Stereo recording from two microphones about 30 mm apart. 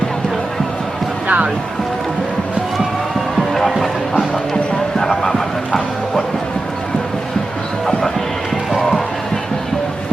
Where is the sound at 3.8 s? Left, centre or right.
Centre.